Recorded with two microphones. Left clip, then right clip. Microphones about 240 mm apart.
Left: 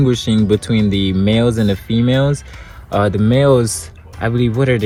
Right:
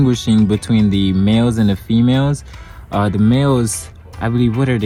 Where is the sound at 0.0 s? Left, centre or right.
Right.